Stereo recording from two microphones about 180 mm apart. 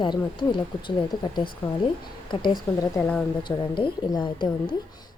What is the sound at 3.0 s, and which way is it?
Speech, 5° left (ahead or behind).